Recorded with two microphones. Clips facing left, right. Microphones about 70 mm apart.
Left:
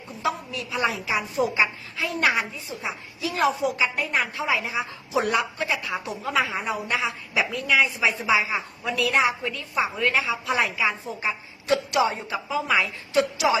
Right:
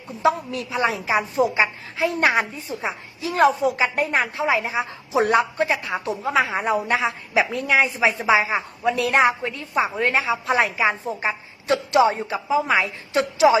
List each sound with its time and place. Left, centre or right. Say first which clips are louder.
0.2 s a woman's voice: right 7 dB; right
2.3 s a woman's voice: right 5 dB; right
4.1 s a woman's voice: right 4 dB; right